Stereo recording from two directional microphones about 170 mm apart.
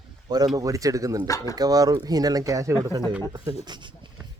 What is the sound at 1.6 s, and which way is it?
Speech, 20° right (ahead or behind).